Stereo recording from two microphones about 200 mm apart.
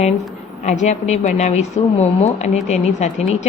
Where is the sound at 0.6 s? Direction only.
35° left (ahead or behind).